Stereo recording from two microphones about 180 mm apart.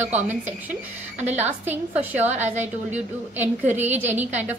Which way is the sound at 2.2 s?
40° right (ahead or behind).